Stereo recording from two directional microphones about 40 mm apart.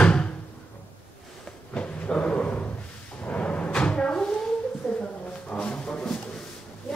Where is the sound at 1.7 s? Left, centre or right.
Left.